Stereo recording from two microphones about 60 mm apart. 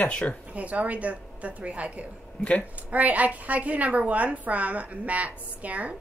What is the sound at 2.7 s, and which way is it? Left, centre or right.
A woman's voice, right.